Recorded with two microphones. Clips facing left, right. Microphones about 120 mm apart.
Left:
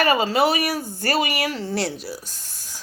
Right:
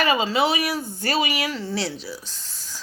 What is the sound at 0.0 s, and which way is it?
Speech, 45° left (ahead or behind).